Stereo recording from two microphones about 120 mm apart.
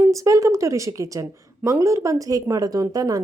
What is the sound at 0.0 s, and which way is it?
A woman's voice, 25° right (ahead or behind).